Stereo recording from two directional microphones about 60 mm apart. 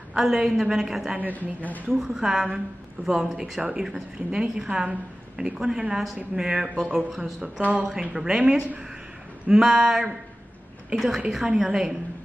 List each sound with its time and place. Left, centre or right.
0.1 s a woman's voice: centre
1.3 s speech: left
2.0 s a woman's voice: centre
7.6 s speech: right
7.9 s a woman's voice: centre